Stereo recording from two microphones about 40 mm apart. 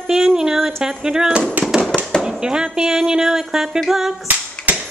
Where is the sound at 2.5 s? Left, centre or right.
Centre.